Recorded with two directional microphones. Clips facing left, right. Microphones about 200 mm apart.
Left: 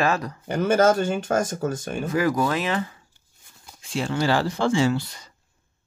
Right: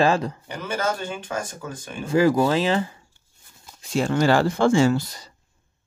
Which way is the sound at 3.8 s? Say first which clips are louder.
Right 4 dB; 45° right (ahead or behind).